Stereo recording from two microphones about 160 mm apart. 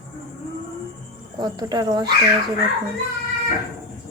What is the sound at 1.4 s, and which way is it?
Speech, 25° right (ahead or behind).